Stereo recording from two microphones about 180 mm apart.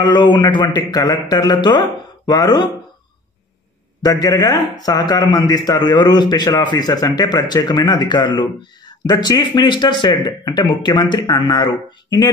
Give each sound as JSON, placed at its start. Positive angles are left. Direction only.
{"t": 0.0, "sound": "a man's voice", "side_deg": 25}
{"t": 4.0, "sound": "a man's voice", "side_deg": 20}